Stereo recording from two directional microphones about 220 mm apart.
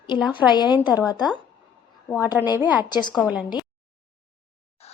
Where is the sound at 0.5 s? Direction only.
20° left (ahead or behind).